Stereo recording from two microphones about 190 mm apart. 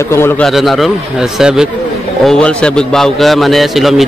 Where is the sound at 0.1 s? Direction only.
15° left (ahead or behind).